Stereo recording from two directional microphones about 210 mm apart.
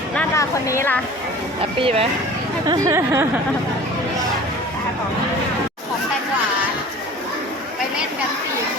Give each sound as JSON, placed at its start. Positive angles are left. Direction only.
{"t": 0.2, "sound": "a woman's voice", "side_deg": 15}
{"t": 1.8, "sound": "speech", "side_deg": -30}
{"t": 2.6, "sound": "speech", "side_deg": -15}